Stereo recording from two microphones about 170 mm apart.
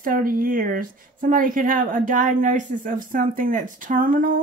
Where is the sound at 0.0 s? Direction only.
55° right (ahead or behind).